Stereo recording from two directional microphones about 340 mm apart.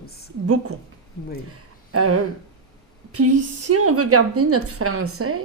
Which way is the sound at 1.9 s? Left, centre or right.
Right.